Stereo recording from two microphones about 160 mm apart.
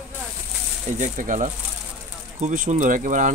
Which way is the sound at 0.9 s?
50° right (ahead or behind).